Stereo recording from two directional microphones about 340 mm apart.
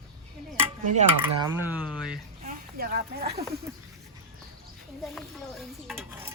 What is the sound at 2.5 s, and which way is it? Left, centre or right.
Speech, right.